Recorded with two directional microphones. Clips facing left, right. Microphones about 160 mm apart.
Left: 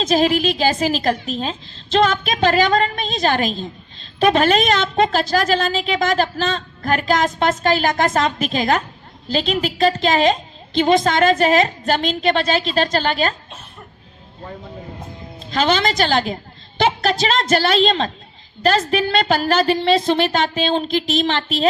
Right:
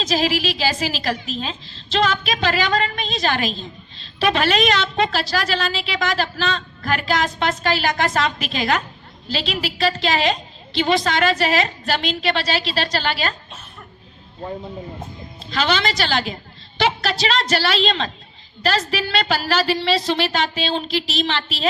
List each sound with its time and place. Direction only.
0.0 s a woman's voice: 50° left (ahead or behind)
15.4 s a woman's voice: 45° left (ahead or behind)